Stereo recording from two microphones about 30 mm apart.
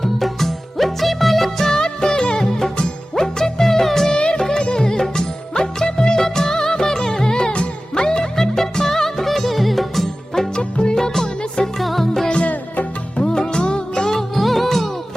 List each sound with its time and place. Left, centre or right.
0.0 s music: centre
1.6 s music: left
4.4 s music: left
5.0 s music of bollywood: centre
7.9 s music: left
8.4 s music: centre
10.5 s music: left
10.9 s music: centre
11.8 s music: centre
13.2 s music: left
14.3 s music: centre